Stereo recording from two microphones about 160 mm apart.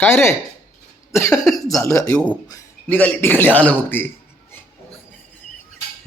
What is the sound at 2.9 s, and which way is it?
Speech, 10° left (ahead or behind).